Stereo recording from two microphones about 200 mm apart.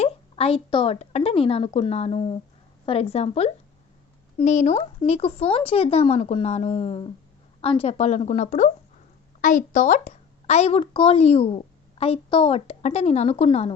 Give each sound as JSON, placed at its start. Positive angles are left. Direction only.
{"t": 0.0, "sound": "a woman's voice", "side_deg": 30}